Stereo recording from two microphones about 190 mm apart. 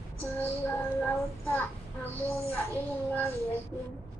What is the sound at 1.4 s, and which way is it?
Speech, 10° left (ahead or behind).